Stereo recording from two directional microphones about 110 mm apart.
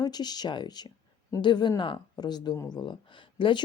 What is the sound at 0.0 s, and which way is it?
A woman's voice, 40° left (ahead or behind).